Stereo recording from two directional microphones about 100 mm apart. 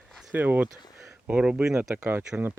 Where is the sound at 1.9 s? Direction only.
25° right (ahead or behind).